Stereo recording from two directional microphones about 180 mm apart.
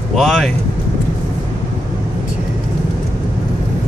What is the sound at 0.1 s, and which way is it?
Speech, centre (ahead or behind).